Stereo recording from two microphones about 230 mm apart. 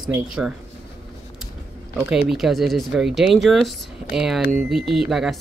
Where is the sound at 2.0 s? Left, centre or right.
Centre.